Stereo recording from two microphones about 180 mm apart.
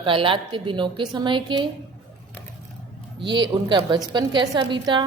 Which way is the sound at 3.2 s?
25° right (ahead or behind).